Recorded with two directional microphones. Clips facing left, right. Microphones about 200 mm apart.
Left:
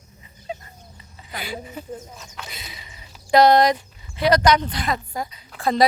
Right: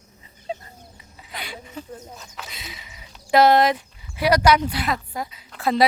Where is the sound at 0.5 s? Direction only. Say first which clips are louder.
Right 2 dB; 30° right (ahead or behind).